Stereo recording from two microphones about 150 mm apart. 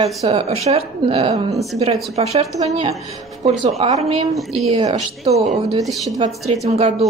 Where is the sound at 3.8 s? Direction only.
45° right (ahead or behind).